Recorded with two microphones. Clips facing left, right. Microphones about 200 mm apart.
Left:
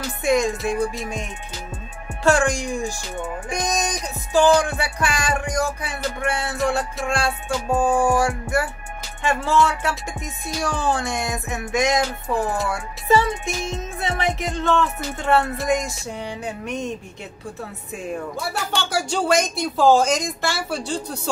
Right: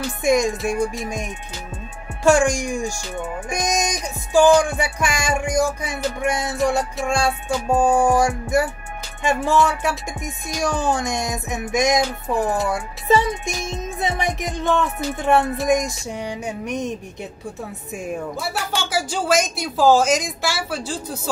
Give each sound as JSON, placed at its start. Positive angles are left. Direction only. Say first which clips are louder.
{"t": 0.2, "sound": "music", "louder": "right 1 dB", "side_deg": -15}
{"t": 2.2, "sound": "music", "louder": "right 3 dB", "side_deg": -15}
{"t": 18.5, "sound": "speech", "louder": "even", "side_deg": -5}